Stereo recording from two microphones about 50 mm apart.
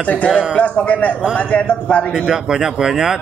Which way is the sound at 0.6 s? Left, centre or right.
Left.